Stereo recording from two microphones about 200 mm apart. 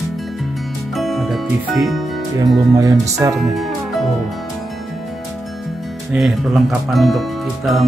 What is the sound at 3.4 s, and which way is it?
Music, centre (ahead or behind).